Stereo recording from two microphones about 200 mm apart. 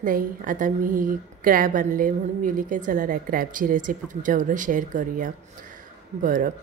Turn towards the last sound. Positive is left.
turn(degrees=-40)  # may be behind; listen again after turning